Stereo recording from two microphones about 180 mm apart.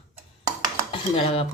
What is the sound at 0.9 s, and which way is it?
Speech, 30° left (ahead or behind).